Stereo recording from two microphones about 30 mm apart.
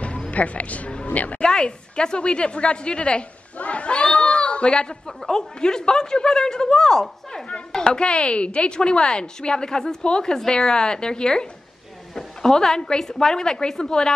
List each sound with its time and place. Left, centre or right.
0.3 s a woman's voice: left
1.4 s a woman's voice: left
3.5 s a sound: left
5.0 s speech: centre
7.8 s a woman's voice: left
12.4 s speech: centre